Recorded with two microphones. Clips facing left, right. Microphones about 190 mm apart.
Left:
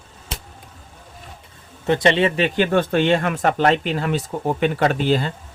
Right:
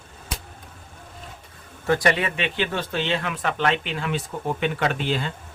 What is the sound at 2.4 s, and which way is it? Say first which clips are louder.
Speech: left 8 dB; 50° left (ahead or behind).